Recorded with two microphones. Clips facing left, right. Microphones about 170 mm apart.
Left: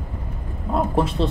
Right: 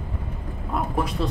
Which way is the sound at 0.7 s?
25° left (ahead or behind).